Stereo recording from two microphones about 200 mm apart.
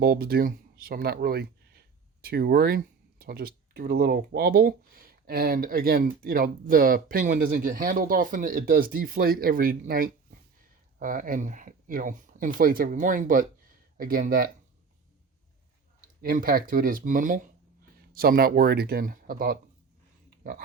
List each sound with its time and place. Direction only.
0.0 s speech: 50° right (ahead or behind)
16.2 s speech: 45° right (ahead or behind)